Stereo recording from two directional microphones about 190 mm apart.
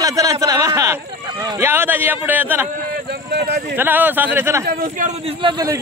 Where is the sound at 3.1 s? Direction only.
60° right (ahead or behind).